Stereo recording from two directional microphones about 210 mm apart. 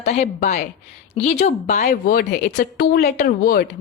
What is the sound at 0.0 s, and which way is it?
Speech, 30° left (ahead or behind).